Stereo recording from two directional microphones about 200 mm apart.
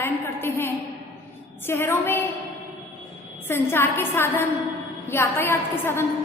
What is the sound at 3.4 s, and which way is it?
A man's voice, 10° left (ahead or behind).